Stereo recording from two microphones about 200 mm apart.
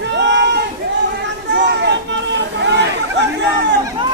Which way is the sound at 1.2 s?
60° right (ahead or behind).